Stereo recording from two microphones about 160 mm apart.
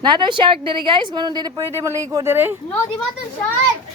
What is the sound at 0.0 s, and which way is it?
Speech, 30° right (ahead or behind).